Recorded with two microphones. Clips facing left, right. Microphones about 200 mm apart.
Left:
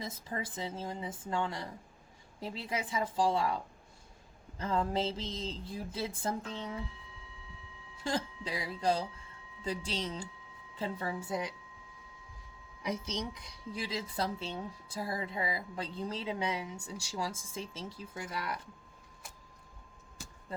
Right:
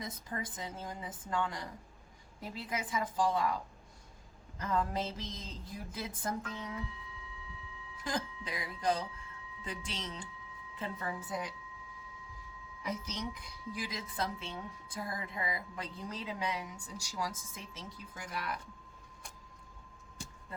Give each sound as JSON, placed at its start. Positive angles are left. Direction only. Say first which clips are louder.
{"t": 0.0, "sound": "speech", "louder": "left 2 dB", "side_deg": 25}
{"t": 7.9, "sound": "speech", "louder": "left 3 dB", "side_deg": 30}
{"t": 13.1, "sound": "speech", "louder": "left 2 dB", "side_deg": 25}